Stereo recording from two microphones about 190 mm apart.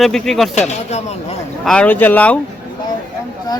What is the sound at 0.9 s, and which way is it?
Speech, 35° left (ahead or behind).